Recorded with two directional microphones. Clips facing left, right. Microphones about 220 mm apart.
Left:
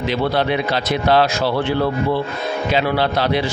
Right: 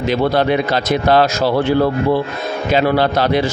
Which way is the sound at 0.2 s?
45° right (ahead or behind).